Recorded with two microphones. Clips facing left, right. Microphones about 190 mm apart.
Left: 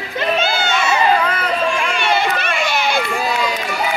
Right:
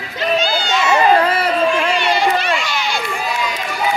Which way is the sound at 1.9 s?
55° left (ahead or behind).